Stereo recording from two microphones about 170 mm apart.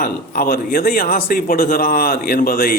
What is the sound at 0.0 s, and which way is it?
Speech, 60° left (ahead or behind).